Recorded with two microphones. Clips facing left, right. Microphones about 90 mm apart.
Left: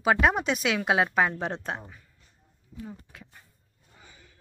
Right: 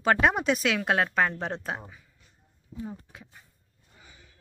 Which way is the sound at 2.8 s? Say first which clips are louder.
Right 3 dB; 20° right (ahead or behind).